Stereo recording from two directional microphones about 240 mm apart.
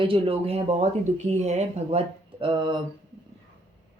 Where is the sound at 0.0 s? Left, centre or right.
Right.